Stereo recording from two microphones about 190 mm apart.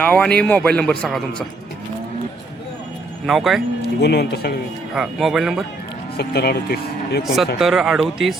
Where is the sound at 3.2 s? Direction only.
Centre (ahead or behind).